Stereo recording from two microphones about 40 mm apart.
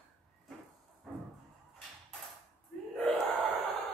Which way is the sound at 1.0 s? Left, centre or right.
Centre.